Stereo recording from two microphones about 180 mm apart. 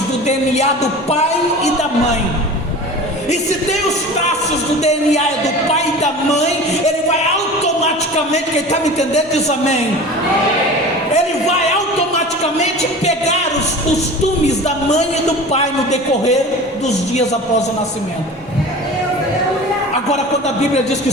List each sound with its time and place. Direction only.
0.3 s a man's voice: 40° left (ahead or behind)
4.8 s a man's voice: 40° left (ahead or behind)
8.3 s a man's voice: 40° left (ahead or behind)
14.4 s a man's voice: 40° left (ahead or behind)